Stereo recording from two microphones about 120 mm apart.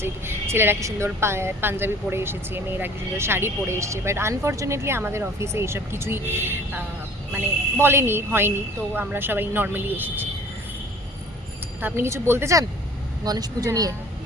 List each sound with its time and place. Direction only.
0.0 s a woman's voice: 20° right (ahead or behind)
11.8 s a woman's voice: 20° right (ahead or behind)